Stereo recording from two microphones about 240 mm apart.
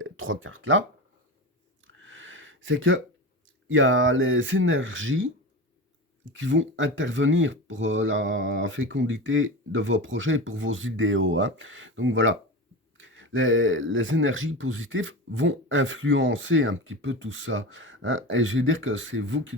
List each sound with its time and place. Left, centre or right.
0.0 s speech: right
1.9 s a sound: right
3.7 s speech: right
6.3 s speech: right